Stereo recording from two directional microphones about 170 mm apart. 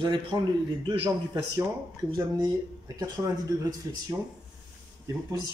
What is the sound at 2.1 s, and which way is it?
Speech, 25° right (ahead or behind).